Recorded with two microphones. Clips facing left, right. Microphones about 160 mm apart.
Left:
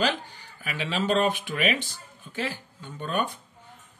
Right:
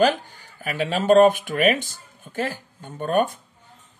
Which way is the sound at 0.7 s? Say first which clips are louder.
Right 8 dB; 45° right (ahead or behind).